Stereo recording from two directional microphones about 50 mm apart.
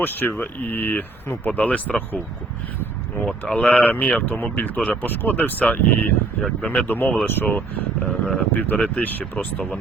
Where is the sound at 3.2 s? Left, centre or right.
Centre.